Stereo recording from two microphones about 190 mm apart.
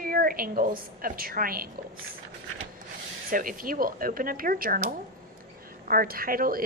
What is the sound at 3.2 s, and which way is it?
A woman's voice, 45° right (ahead or behind).